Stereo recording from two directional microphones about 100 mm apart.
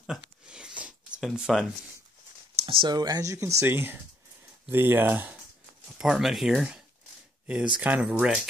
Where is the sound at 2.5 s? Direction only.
60° right (ahead or behind).